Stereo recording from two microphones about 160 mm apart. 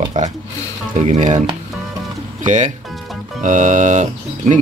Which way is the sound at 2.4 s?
50° right (ahead or behind).